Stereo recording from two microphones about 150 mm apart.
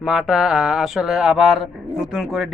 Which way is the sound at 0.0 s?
Centre (ahead or behind).